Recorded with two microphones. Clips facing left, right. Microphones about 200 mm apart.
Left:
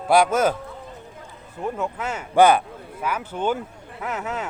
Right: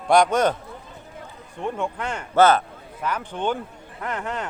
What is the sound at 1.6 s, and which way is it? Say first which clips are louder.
Speech: even; 5° left (ahead or behind).